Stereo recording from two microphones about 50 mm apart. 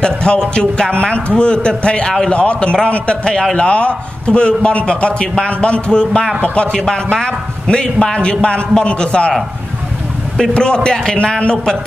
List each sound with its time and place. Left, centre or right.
0.0 s a man's voice: centre
6.7 s a man's voice: centre
10.4 s a man's voice: centre